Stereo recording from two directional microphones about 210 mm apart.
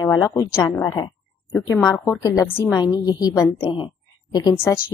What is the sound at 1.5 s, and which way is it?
A woman's voice, 10° left (ahead or behind).